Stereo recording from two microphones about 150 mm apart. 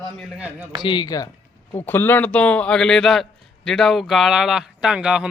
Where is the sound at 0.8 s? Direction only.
30° left (ahead or behind).